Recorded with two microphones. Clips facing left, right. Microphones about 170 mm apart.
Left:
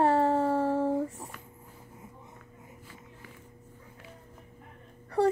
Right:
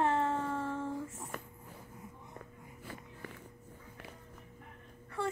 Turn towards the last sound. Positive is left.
turn(degrees=35)  # may be behind; listen again after turning